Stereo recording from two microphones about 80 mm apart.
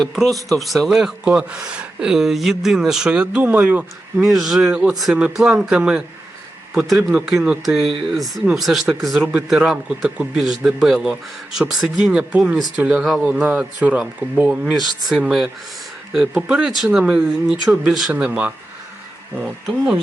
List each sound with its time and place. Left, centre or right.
0.0 s speech: centre; by 3.8 s right
4.2 s speech: centre
4.7 s speech: centre
7.1 s speech: centre
9.2 s speech: centre
18.1 s speech: centre
19.6 s speech: centre